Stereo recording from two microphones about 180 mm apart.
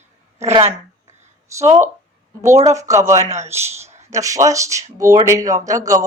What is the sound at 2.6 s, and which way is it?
Speech, 15° right (ahead or behind).